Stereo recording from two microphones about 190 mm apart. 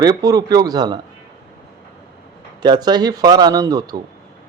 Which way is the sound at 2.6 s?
20° right (ahead or behind).